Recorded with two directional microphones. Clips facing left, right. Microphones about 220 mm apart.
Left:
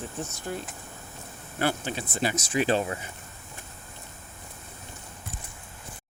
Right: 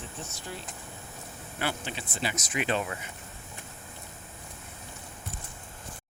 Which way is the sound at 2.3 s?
30° left (ahead or behind).